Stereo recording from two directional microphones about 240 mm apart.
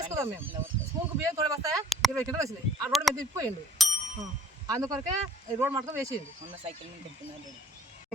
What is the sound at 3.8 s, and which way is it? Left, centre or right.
Bicycle bell, centre.